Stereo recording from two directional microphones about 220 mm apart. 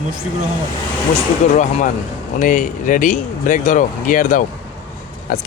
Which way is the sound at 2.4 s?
35° left (ahead or behind).